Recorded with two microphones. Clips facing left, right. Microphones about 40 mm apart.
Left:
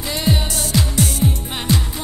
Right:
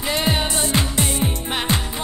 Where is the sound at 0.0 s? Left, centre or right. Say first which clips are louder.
Even; right.